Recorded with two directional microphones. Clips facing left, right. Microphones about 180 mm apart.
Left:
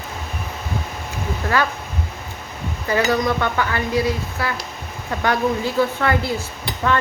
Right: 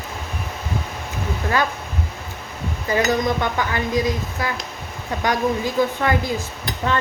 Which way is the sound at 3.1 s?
15° right (ahead or behind).